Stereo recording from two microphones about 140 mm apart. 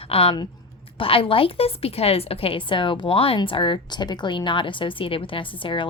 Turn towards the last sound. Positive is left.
turn(degrees=35)  # may be behind; listen again after turning